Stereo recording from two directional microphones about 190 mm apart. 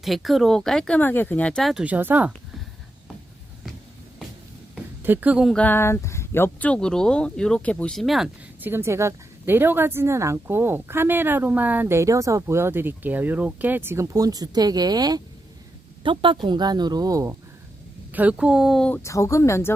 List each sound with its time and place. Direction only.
0.0 s speech: centre (ahead or behind)
4.7 s a woman's voice: 10° right (ahead or behind)
18.1 s speech: 10° right (ahead or behind)
19.0 s speech: 15° left (ahead or behind)